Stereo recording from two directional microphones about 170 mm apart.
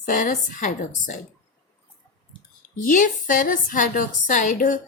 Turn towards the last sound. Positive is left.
turn(degrees=50)  # may be behind; listen again after turning